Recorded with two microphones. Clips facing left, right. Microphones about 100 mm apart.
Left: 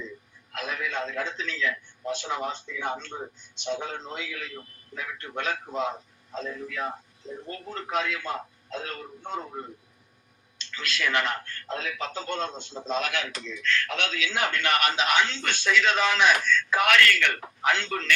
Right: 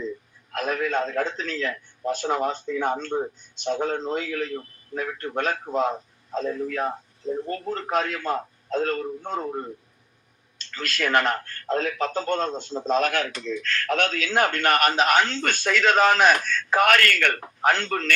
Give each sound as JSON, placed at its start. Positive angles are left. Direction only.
{"t": 0.5, "sound": "a man's voice", "side_deg": -45}